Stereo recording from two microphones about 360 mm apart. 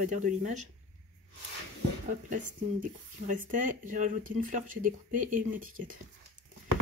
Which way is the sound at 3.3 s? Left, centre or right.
Right.